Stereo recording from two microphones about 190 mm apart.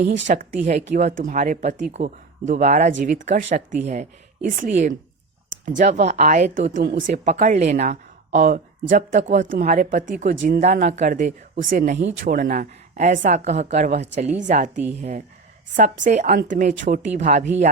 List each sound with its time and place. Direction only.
0.0 s a woman's voice: 40° right (ahead or behind)
15.7 s a woman's voice: 40° right (ahead or behind)